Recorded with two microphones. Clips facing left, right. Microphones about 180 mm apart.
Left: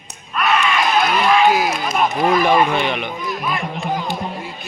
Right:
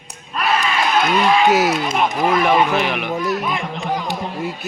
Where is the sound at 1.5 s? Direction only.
70° right (ahead or behind).